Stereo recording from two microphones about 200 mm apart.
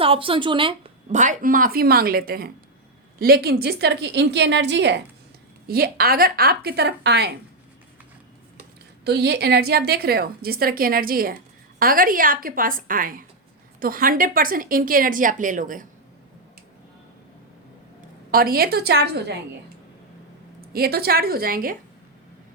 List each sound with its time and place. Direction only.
0.0 s a woman's voice: 25° right (ahead or behind)
1.2 s a woman's voice: 40° right (ahead or behind); by 4.9 s 60° right (ahead or behind)
5.6 s a woman's voice: 50° right (ahead or behind)
9.0 s a woman's voice: 55° right (ahead or behind)
18.3 s a woman's voice: 45° right (ahead or behind)
20.7 s a woman's voice: 50° right (ahead or behind)